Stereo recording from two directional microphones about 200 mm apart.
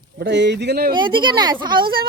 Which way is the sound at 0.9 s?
25° right (ahead or behind).